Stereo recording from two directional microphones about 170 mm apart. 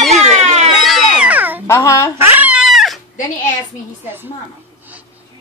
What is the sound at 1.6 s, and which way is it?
Speech, 20° left (ahead or behind).